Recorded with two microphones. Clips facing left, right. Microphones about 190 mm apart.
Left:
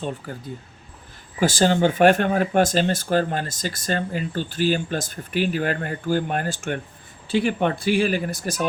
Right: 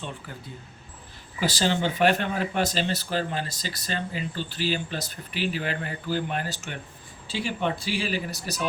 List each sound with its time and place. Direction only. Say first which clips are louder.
0.2 s speech: left 7 dB; 40° left (ahead or behind)